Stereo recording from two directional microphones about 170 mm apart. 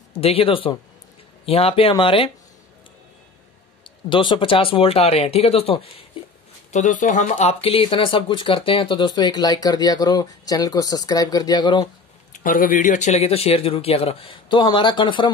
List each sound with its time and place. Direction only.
0.2 s speech: 35° left (ahead or behind)
3.8 s speech: 30° left (ahead or behind)
6.7 s speech: 45° left (ahead or behind); by 11.8 s 25° left (ahead or behind)
11.8 s speech: 50° left (ahead or behind); by 15.3 s 30° left (ahead or behind)